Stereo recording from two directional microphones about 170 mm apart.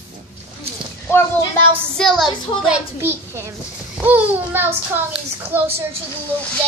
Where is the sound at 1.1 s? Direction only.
15° left (ahead or behind).